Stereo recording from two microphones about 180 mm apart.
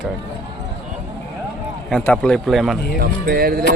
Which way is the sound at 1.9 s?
5° left (ahead or behind).